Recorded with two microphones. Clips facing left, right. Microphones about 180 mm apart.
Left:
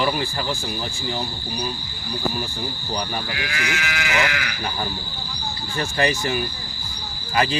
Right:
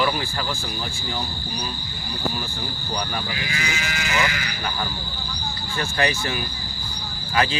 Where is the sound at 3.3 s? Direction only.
65° left (ahead or behind).